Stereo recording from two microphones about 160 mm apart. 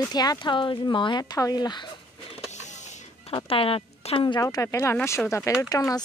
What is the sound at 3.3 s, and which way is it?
Speech, 35° left (ahead or behind).